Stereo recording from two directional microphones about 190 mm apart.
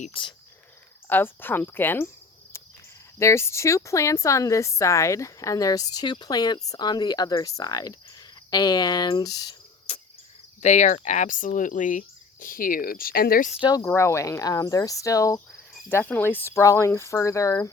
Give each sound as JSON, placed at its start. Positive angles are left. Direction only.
{"t": 0.0, "sound": "speech", "side_deg": 25}
{"t": 1.0, "sound": "speech", "side_deg": 10}
{"t": 3.2, "sound": "speech", "side_deg": 15}
{"t": 9.9, "sound": "cricket", "side_deg": 30}
{"t": 10.6, "sound": "speech", "side_deg": 40}
{"t": 13.5, "sound": "speech", "side_deg": 25}